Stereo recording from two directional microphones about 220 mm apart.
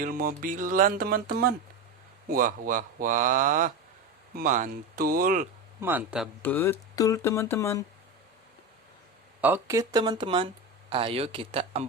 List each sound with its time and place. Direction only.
0.0 s music: 40° right (ahead or behind)
5.8 s speech: 10° right (ahead or behind)
6.4 s speech: 10° left (ahead or behind)
9.4 s speech: 10° right (ahead or behind); by 11.9 s 25° right (ahead or behind)